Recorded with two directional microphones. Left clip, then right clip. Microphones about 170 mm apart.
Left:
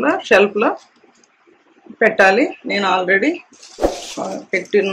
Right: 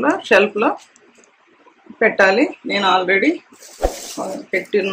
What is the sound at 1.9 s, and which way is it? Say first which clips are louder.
Speech: left 1 dB; 15° left (ahead or behind).